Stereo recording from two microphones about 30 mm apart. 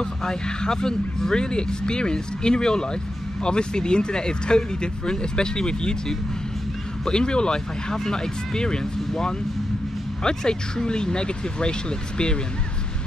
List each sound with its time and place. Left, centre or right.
0.2 s speech: left
10.2 s speech: left